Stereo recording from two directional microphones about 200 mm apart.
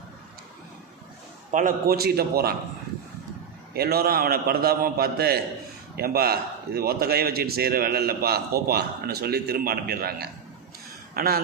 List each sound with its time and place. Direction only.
1.5 s a man's voice: 40° right (ahead or behind)
3.8 s a man's voice: 50° right (ahead or behind)